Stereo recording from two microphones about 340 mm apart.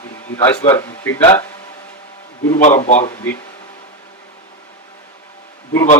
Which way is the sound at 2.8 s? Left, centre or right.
Centre.